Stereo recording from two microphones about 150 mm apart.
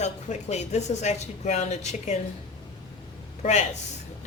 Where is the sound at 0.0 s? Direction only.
50° left (ahead or behind).